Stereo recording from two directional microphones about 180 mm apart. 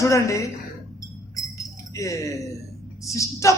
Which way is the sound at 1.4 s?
15° left (ahead or behind).